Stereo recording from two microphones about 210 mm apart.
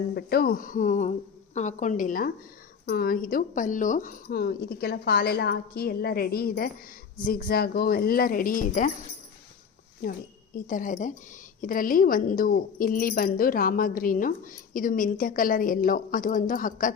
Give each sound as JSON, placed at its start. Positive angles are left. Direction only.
{"t": 0.2, "sound": "a woman's voice", "side_deg": 45}
{"t": 10.0, "sound": "a woman's voice", "side_deg": 40}